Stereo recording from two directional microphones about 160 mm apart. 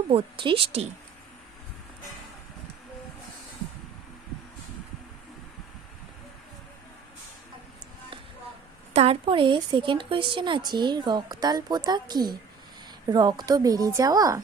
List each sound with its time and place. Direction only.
0.1 s a woman's voice: 35° right (ahead or behind)
8.9 s a woman's voice: 40° right (ahead or behind); by 14.4 s 20° right (ahead or behind)